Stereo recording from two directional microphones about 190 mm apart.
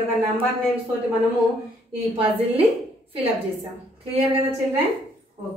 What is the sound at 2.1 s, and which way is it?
Speech, 30° right (ahead or behind).